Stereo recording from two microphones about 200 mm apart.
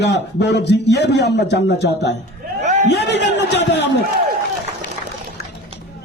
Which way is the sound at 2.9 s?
60° left (ahead or behind).